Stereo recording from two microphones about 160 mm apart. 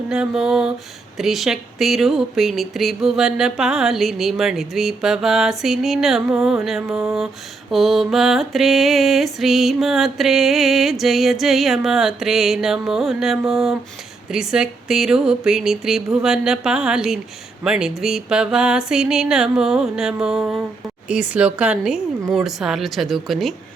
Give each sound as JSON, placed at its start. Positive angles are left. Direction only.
{"t": 0.1, "sound": "mantra", "side_deg": -5}